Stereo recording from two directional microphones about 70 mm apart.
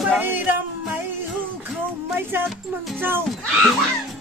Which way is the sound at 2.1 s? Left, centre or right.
Right.